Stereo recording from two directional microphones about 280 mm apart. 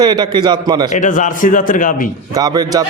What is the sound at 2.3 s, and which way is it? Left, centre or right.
Speech, centre.